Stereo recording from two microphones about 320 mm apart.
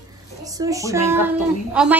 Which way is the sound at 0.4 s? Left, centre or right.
Centre.